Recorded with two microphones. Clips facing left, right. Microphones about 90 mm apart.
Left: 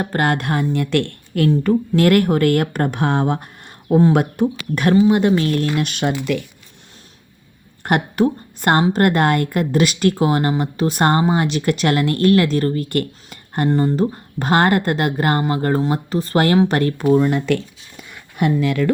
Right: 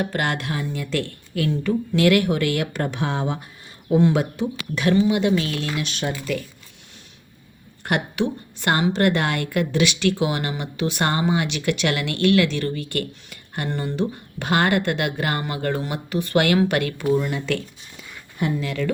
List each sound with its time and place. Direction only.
0.0 s speech: 40° left (ahead or behind); by 1.1 s 60° left (ahead or behind)
1.3 s speech: 45° left (ahead or behind); by 6.1 s 60° left (ahead or behind)
7.9 s a woman's voice: 45° left (ahead or behind)